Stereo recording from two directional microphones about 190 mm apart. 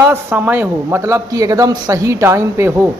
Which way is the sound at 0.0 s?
10° right (ahead or behind).